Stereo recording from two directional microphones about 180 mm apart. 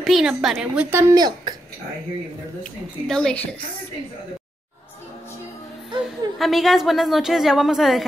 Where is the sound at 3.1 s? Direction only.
5° left (ahead or behind).